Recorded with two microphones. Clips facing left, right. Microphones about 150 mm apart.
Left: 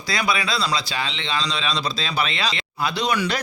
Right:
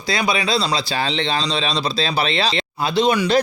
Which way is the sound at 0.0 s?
25° right (ahead or behind).